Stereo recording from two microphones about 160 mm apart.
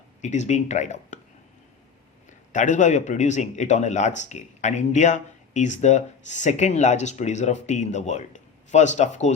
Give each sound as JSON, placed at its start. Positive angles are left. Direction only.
{"t": 0.2, "sound": "speech", "side_deg": 50}
{"t": 2.5, "sound": "speech", "side_deg": 50}